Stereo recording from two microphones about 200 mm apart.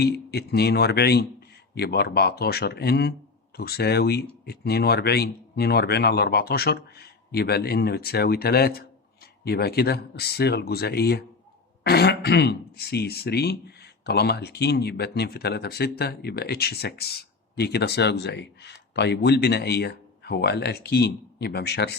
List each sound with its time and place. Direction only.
0.0 s speech: 55° left (ahead or behind)